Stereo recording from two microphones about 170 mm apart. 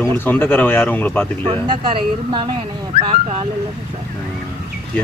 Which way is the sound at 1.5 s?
30° right (ahead or behind).